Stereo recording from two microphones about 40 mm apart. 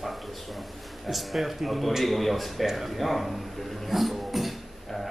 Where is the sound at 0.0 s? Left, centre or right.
Centre.